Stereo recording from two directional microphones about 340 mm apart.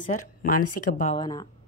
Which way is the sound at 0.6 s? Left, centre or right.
Left.